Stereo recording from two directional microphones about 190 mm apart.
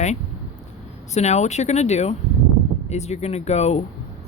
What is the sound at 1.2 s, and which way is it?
Speech, 35° left (ahead or behind).